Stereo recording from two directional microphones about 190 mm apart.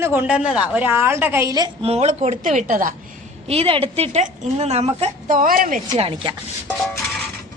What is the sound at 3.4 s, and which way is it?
Speech, 30° right (ahead or behind).